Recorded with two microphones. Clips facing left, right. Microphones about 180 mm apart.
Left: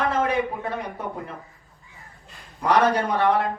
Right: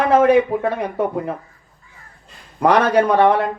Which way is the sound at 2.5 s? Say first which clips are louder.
Right 5 dB; 75° right (ahead or behind).